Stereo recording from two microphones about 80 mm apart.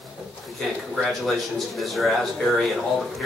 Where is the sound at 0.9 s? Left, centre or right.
Centre.